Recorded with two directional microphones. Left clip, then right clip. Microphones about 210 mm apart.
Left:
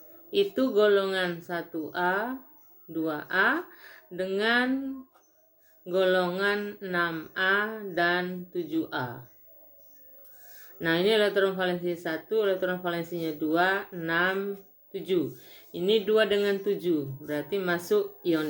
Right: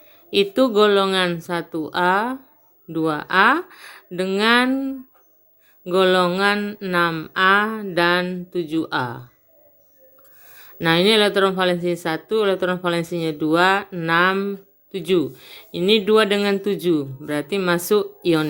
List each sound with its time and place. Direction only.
0.3 s speech: 50° right (ahead or behind)
5.8 s speech: 50° right (ahead or behind)
10.8 s speech: 45° right (ahead or behind)